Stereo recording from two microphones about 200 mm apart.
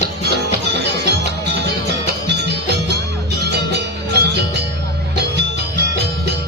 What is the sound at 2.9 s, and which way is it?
Music, 55° right (ahead or behind).